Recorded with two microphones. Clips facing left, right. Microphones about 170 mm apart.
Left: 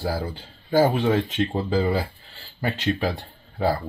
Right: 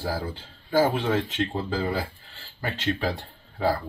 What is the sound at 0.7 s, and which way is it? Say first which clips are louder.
Speech: left 3 dB; 20° left (ahead or behind).